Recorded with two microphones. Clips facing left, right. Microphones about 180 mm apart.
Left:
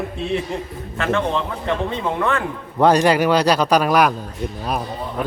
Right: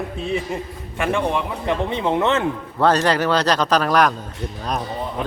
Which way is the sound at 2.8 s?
15° left (ahead or behind).